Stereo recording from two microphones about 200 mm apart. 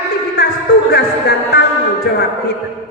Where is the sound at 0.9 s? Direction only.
55° left (ahead or behind).